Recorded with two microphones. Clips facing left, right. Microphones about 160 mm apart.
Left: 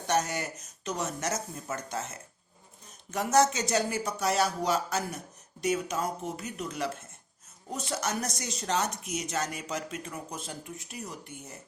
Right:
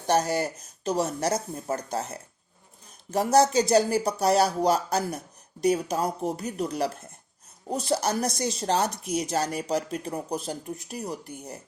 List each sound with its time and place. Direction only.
0.1 s speech: 35° right (ahead or behind)